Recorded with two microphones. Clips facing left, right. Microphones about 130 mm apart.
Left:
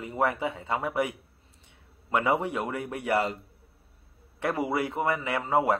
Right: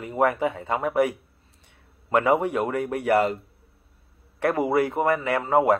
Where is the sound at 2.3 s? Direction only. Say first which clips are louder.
Right 6 dB; 55° right (ahead or behind).